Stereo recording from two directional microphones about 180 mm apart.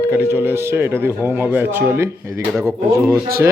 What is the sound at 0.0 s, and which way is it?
Speech, 15° right (ahead or behind).